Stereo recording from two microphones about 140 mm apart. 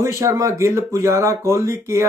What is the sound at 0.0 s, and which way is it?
Speech, 20° right (ahead or behind).